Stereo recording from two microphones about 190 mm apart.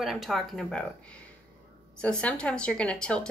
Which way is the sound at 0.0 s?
Centre (ahead or behind).